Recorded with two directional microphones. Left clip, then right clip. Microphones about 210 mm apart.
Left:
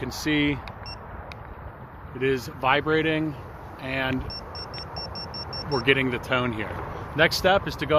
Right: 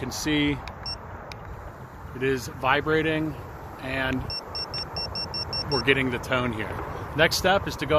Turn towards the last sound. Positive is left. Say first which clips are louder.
# left 1 dB
turn(degrees=25)  # may be behind; listen again after turning